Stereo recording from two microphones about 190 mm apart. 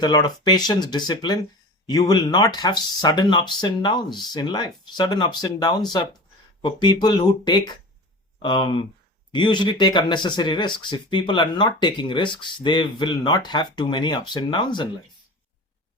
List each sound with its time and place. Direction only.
0.0 s speech: 20° left (ahead or behind)